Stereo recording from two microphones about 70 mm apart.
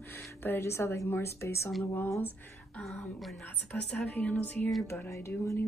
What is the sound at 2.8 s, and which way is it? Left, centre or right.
Speech, centre.